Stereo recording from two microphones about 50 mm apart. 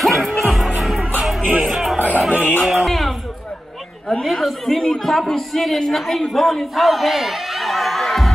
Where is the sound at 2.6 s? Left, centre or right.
Centre.